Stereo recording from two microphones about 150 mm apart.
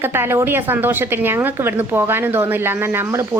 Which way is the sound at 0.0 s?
15° right (ahead or behind).